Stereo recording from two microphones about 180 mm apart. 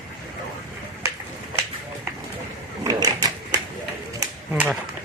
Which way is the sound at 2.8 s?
20° right (ahead or behind).